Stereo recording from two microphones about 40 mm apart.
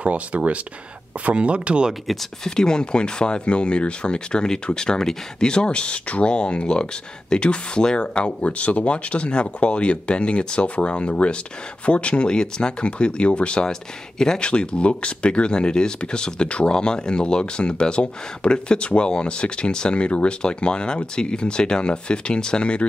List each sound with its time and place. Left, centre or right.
0.0 s speech: right
2.1 s speech: centre
2.4 s speech: centre
13.7 s speech: centre
14.4 s speech: left